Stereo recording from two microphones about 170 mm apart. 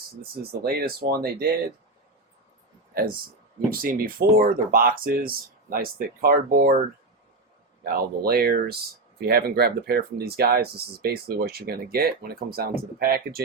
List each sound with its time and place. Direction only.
0.6 s speech: 65° right (ahead or behind)
3.7 s speech: 60° right (ahead or behind)
7.9 s speech: 60° right (ahead or behind)